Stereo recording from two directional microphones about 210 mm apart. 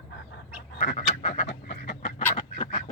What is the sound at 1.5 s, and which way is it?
Chicken, 45° left (ahead or behind).